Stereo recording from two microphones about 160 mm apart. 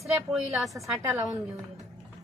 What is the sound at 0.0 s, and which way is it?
A woman's voice, centre (ahead or behind).